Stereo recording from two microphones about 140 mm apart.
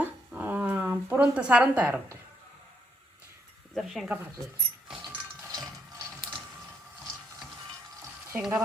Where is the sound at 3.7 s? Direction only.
Centre (ahead or behind).